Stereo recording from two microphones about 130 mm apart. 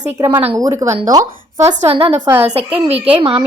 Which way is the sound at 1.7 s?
60° right (ahead or behind).